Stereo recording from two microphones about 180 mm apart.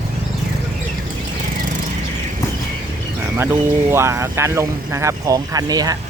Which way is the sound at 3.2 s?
15° right (ahead or behind).